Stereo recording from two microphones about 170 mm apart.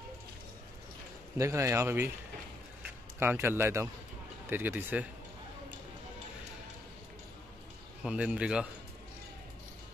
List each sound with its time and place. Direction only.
1.4 s speech: 15° right (ahead or behind)
3.2 s speech: 15° right (ahead or behind)
8.0 s a man's voice: 5° right (ahead or behind)